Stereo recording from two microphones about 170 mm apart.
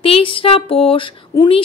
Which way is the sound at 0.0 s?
30° left (ahead or behind).